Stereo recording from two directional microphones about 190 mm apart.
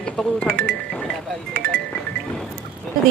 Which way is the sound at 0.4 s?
55° right (ahead or behind).